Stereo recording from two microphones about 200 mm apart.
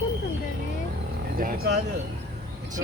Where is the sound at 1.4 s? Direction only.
45° right (ahead or behind).